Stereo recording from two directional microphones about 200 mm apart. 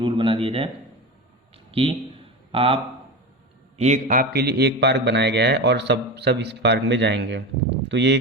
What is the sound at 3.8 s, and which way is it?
Speech, 35° right (ahead or behind).